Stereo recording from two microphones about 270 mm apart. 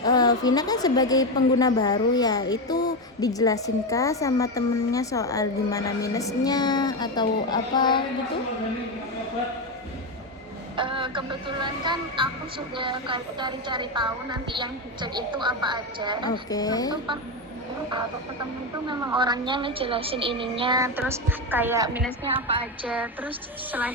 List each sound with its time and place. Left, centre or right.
0.0 s a woman's voice: centre
10.8 s speech: centre
16.3 s a woman's voice: centre
18.9 s speech: centre
22.3 s a woman's voice: centre
22.9 s a woman's voice: centre